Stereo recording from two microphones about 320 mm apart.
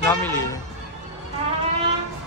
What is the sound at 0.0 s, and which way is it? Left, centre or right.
Speech, centre.